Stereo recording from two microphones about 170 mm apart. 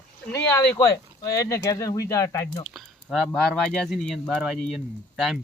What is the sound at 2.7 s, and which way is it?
Speech, centre (ahead or behind).